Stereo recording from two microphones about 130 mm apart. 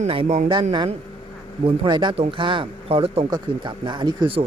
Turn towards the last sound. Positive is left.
turn(degrees=-40)  # may be behind; listen again after turning